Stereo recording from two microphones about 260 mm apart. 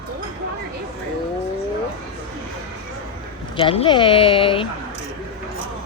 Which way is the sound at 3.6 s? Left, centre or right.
Centre.